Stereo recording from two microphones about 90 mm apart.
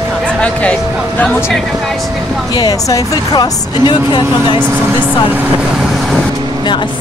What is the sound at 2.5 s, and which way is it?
Speech, 45° left (ahead or behind).